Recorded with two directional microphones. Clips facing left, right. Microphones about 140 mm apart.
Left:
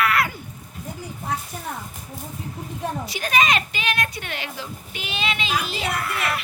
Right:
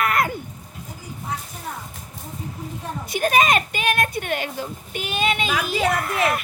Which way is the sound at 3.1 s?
50° right (ahead or behind).